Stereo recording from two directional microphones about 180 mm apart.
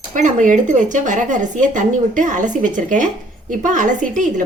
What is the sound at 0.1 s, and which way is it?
A woman's voice, 45° right (ahead or behind).